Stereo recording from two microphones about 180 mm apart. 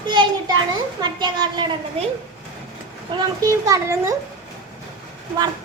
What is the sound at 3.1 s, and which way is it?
A child's voice, 20° right (ahead or behind).